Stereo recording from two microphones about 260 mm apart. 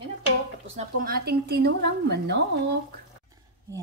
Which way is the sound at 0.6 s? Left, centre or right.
Right.